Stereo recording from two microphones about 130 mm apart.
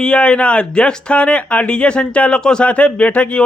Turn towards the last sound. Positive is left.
turn(degrees=10)  # may be behind; listen again after turning